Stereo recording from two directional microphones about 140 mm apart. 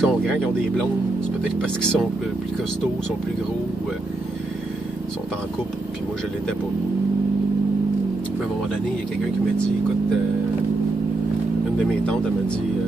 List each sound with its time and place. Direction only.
0.0 s speech: 5° left (ahead or behind)